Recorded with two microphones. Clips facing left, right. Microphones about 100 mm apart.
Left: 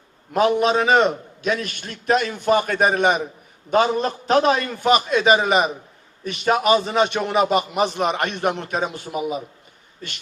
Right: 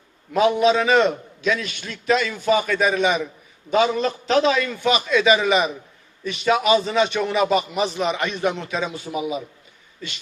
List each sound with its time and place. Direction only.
0.3 s a man's voice: 45° left (ahead or behind)